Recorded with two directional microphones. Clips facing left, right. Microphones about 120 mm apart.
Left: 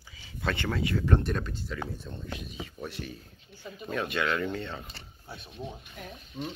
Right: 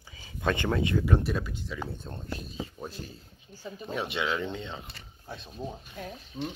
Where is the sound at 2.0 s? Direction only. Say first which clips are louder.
Right 1 dB; 40° right (ahead or behind).